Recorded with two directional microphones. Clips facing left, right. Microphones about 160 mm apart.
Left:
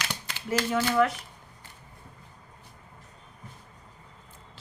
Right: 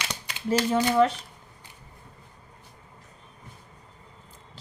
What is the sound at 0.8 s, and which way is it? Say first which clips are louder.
Speech: right 2 dB; 25° right (ahead or behind).